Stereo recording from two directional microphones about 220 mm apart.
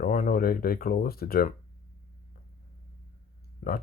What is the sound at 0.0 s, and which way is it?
Speech, 40° left (ahead or behind).